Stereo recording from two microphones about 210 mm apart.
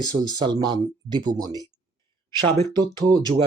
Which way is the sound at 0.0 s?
20° right (ahead or behind).